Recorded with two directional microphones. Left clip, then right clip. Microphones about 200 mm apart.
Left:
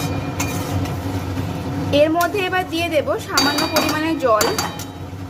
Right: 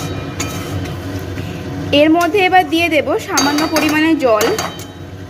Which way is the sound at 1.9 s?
15° right (ahead or behind).